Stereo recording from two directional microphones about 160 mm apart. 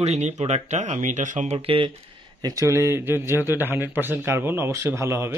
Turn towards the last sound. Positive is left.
turn(degrees=-15)  # may be behind; listen again after turning